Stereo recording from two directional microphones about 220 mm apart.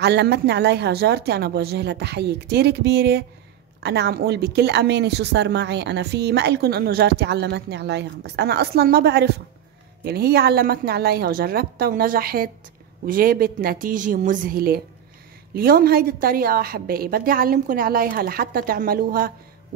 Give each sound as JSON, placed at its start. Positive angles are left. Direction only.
{"t": 0.0, "sound": "a woman's voice", "side_deg": -50}